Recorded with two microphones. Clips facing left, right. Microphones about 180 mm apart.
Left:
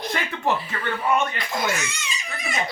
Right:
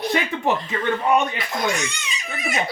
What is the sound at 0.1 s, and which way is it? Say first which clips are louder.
A man's voice: right 1 dB; 15° right (ahead or behind).